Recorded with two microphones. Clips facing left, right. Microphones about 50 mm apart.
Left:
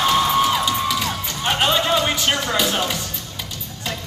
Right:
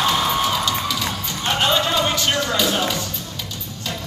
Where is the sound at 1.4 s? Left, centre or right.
Centre.